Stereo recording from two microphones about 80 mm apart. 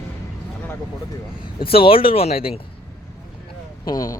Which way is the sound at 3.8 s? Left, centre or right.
Left.